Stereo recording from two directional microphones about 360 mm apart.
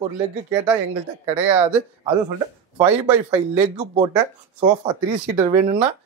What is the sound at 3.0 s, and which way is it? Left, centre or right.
Speech, centre.